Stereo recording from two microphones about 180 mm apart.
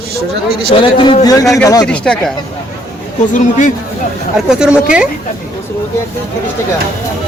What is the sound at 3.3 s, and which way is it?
Speech, 45° left (ahead or behind).